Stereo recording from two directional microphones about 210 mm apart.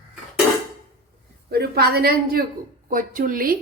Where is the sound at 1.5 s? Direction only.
50° right (ahead or behind).